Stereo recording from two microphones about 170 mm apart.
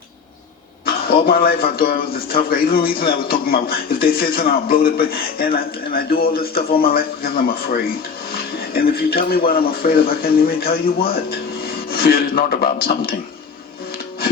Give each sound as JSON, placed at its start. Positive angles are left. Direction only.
{"t": 0.9, "sound": "a man's voice", "side_deg": 60}